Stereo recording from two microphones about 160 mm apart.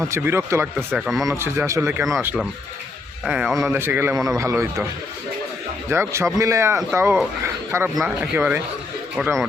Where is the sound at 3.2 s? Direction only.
5° right (ahead or behind).